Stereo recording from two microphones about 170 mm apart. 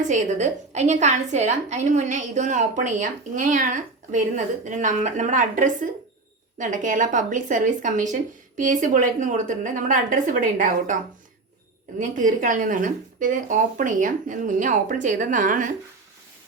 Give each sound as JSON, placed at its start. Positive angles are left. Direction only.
{"t": 0.1, "sound": "a woman's voice", "side_deg": -45}
{"t": 11.9, "sound": "a woman's voice", "side_deg": -50}